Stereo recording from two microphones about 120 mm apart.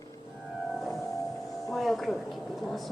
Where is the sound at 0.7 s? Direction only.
Centre (ahead or behind).